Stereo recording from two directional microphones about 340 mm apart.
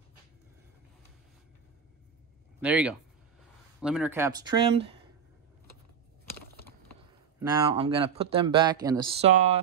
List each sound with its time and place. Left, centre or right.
2.6 s speech: centre
7.3 s speech: centre